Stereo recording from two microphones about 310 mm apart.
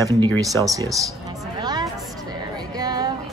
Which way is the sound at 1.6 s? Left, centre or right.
Centre.